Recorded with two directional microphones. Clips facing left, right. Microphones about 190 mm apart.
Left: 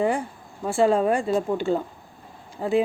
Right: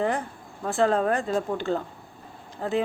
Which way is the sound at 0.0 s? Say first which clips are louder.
Left 3 dB; 10° left (ahead or behind).